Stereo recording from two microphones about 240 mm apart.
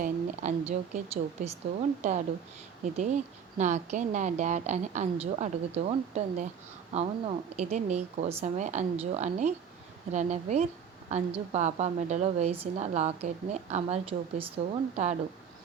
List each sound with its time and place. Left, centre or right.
0.0 s a woman's voice: right